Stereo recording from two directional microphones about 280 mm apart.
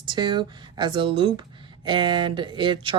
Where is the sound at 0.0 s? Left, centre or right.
Centre.